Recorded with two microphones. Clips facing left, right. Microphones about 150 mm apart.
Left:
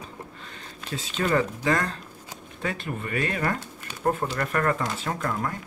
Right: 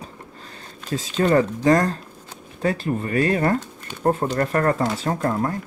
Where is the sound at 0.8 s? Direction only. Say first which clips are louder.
Right 7 dB; 40° right (ahead or behind).